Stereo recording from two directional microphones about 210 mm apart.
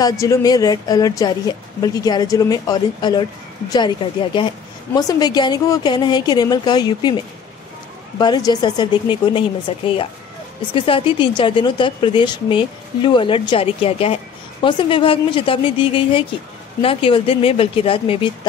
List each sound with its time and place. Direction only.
0.0 s a woman's voice: 15° left (ahead or behind)
8.2 s a woman's voice: 20° left (ahead or behind)